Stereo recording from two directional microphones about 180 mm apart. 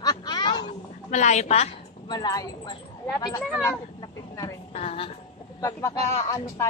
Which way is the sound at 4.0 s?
15° left (ahead or behind).